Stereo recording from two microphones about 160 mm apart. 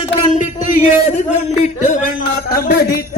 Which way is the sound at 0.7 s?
50° left (ahead or behind).